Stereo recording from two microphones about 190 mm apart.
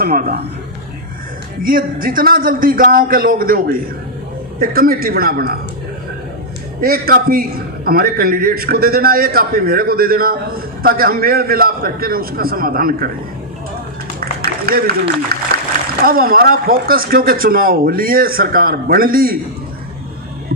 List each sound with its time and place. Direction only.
0.0 s speech: 50° right (ahead or behind)
1.6 s speech: 50° right (ahead or behind)
6.8 s speech: 50° right (ahead or behind)
14.2 s a sound: 50° right (ahead or behind)
16.0 s speech: 50° right (ahead or behind)